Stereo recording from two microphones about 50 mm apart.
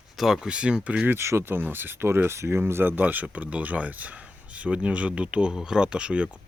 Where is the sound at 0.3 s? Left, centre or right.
Centre.